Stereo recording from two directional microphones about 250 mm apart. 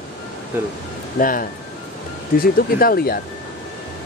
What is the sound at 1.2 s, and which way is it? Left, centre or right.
Speech, left.